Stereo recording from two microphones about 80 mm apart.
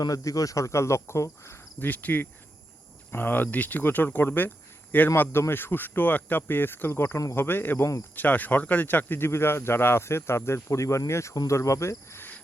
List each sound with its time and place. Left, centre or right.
0.0 s speech: left
1.8 s speech: left
11.3 s cricket: left